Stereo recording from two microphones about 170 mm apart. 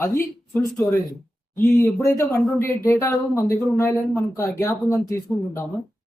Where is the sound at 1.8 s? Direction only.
20° left (ahead or behind).